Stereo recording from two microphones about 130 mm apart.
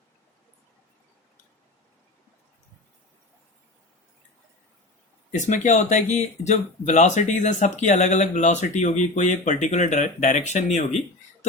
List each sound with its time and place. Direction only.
5.3 s speech: 70° left (ahead or behind)